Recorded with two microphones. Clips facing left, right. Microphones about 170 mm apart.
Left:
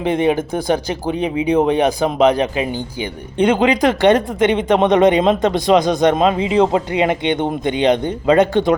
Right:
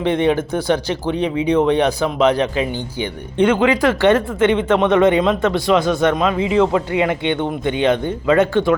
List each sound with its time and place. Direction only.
0.0 s speech: 15° left (ahead or behind)